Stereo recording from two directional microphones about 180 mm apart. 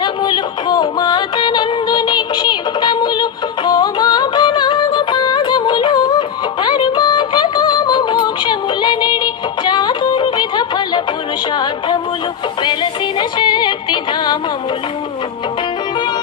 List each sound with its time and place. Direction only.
0.0 s yodeling: 25° left (ahead or behind)
11.5 s music: 25° left (ahead or behind)